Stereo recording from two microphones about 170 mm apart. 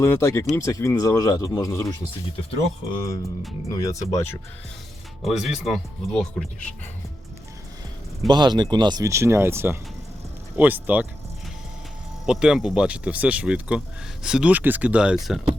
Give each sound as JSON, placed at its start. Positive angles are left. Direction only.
{"t": 0.0, "sound": "speech", "side_deg": 15}
{"t": 3.7, "sound": "speech", "side_deg": 20}
{"t": 5.2, "sound": "speech", "side_deg": 0}
{"t": 8.3, "sound": "speech", "side_deg": -25}
{"t": 12.2, "sound": "speech", "side_deg": -5}